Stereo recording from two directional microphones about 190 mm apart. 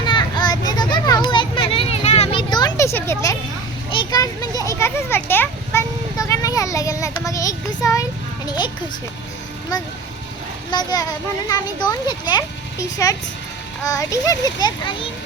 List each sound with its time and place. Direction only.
0.0 s children playing: 25° left (ahead or behind)
8.4 s a child's voice: 25° left (ahead or behind)
10.7 s a child's voice: 20° left (ahead or behind)